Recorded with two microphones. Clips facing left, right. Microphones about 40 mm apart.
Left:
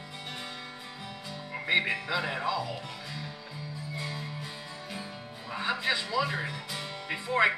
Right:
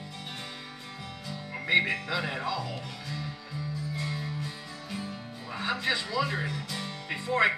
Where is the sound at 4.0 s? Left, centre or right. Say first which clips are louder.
Right 1 dB; centre.